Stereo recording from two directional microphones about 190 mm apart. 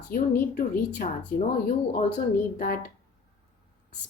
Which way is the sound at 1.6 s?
50° left (ahead or behind).